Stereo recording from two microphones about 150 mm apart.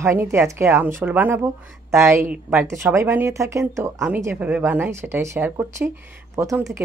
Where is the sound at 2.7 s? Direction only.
20° right (ahead or behind).